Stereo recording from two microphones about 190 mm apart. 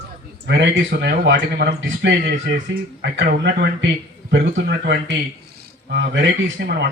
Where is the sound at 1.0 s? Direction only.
65° right (ahead or behind).